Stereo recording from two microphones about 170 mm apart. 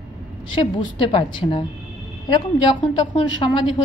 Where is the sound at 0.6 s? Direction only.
30° left (ahead or behind).